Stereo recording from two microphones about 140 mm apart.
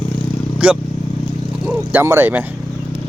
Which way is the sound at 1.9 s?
15° right (ahead or behind).